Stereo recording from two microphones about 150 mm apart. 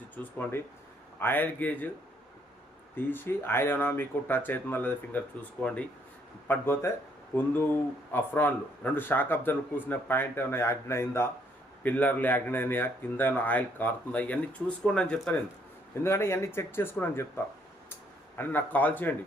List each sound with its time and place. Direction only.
0.2 s speech: 15° left (ahead or behind)
2.9 s speech: 15° left (ahead or behind)
16.0 s speech: 15° left (ahead or behind)